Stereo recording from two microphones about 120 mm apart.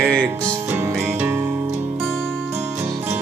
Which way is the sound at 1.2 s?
15° right (ahead or behind).